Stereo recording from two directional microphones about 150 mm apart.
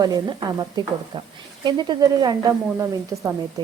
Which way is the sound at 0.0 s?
30° right (ahead or behind).